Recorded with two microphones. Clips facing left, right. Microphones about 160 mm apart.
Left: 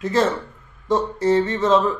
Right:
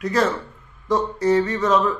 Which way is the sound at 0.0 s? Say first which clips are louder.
Left 1 dB; 25° left (ahead or behind).